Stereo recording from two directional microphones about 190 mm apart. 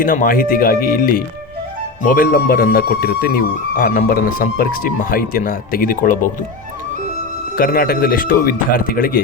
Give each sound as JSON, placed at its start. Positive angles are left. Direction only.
{"t": 0.0, "sound": "speech", "side_deg": 45}
{"t": 7.5, "sound": "speech", "side_deg": 50}